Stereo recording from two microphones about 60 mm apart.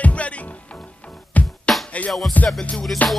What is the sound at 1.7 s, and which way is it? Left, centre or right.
Music, centre.